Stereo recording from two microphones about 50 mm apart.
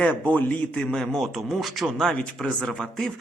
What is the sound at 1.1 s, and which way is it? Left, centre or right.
Speech, centre.